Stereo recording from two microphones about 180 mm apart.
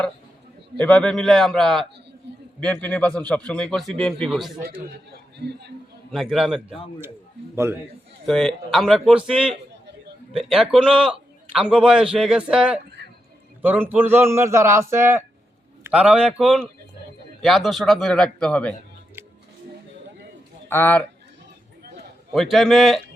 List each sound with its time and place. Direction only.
0.9 s a man's voice: 5° left (ahead or behind)
2.3 s a sound: 75° right (ahead or behind)
2.6 s a man's voice: 5° left (ahead or behind)
5.1 s a man's voice: 70° right (ahead or behind)
6.1 s a man's voice: centre (ahead or behind)
7.5 s a man's voice: 15° right (ahead or behind)
8.3 s a man's voice: 5° left (ahead or behind)
20.7 s speech: 10° left (ahead or behind)
22.3 s a man's voice: centre (ahead or behind)